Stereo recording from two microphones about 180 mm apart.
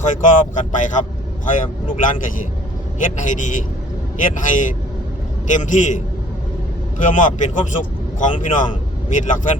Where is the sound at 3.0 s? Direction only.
45° left (ahead or behind).